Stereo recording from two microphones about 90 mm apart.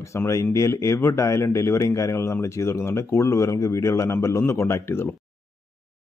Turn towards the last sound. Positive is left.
turn(degrees=30)  # may be behind; listen again after turning